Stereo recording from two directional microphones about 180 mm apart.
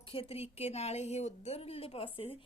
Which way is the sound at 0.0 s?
30° left (ahead or behind).